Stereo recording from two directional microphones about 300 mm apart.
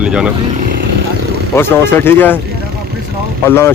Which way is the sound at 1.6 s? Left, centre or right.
Centre.